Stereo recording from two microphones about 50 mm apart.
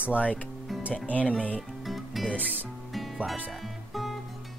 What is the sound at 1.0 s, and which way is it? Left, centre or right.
Speech, left.